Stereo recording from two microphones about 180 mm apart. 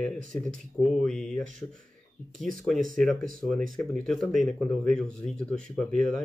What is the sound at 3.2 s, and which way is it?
Speech, 50° right (ahead or behind).